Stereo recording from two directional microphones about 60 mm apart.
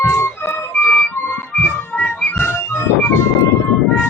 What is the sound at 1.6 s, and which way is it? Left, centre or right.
Music, left.